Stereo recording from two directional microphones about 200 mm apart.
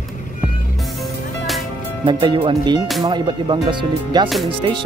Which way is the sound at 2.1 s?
25° right (ahead or behind).